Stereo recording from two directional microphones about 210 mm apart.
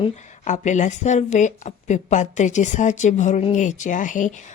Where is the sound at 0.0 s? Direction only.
35° left (ahead or behind).